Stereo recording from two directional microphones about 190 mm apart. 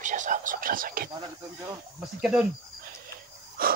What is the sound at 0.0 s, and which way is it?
Whispering, 40° right (ahead or behind).